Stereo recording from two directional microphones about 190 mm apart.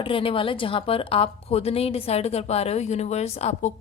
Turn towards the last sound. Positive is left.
turn(degrees=35)  # may be behind; listen again after turning